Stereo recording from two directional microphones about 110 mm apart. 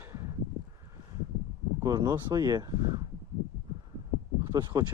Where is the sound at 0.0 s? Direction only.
20° right (ahead or behind).